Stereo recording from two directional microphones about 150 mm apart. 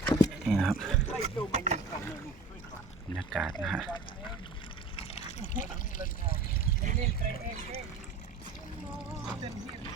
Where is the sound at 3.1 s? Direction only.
Centre (ahead or behind).